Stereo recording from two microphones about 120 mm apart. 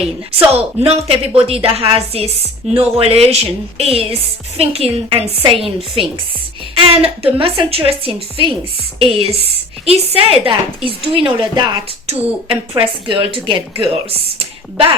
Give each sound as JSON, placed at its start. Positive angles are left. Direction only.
{"t": 0.0, "sound": "a woman's voice", "side_deg": -55}
{"t": 5.0, "sound": "a woman's voice", "side_deg": -45}
{"t": 12.0, "sound": "a woman's voice", "side_deg": -50}